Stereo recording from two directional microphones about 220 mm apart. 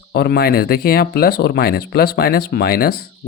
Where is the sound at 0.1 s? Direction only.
45° left (ahead or behind).